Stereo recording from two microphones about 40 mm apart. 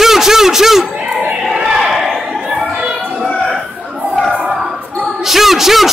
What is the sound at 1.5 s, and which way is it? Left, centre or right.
Crowd, centre.